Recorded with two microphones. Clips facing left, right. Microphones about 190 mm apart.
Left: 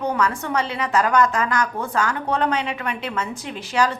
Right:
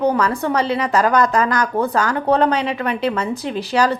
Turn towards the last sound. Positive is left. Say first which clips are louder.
# right 4 dB
turn(degrees=-40)  # may be behind; listen again after turning